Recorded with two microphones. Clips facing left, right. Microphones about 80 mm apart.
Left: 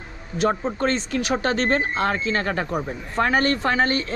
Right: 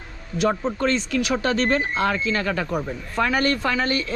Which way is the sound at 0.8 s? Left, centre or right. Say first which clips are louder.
Right 1 dB; left.